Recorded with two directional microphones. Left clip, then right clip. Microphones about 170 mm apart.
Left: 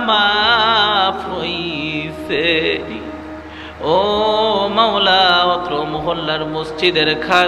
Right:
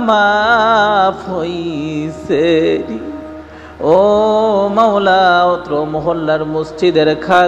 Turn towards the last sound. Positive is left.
turn(degrees=-40)  # may be behind; listen again after turning